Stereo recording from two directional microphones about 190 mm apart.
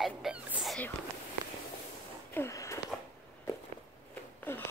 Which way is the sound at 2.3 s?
15° left (ahead or behind).